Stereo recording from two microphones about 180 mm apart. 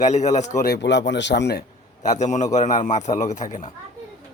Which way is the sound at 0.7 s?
75° left (ahead or behind).